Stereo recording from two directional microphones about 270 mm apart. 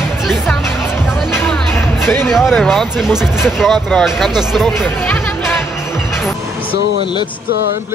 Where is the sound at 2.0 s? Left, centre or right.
Centre.